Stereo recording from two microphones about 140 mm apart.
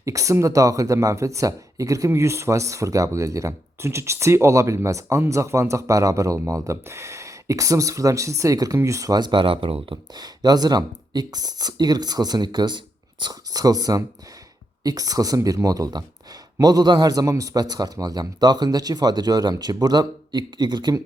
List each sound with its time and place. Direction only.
0.0 s speech: 25° right (ahead or behind); by 10.0 s 40° right (ahead or behind)
10.2 s speech: 30° right (ahead or behind)